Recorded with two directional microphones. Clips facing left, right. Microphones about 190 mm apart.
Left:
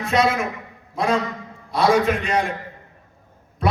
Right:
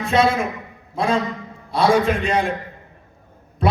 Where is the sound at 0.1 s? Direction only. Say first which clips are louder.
Right 2 dB; 30° right (ahead or behind).